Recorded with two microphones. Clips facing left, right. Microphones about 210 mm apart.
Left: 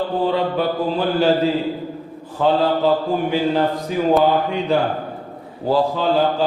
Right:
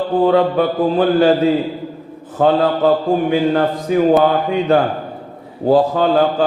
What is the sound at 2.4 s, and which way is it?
Speech, 50° right (ahead or behind).